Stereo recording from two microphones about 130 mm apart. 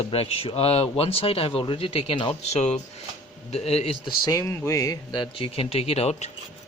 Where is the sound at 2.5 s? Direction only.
60° left (ahead or behind).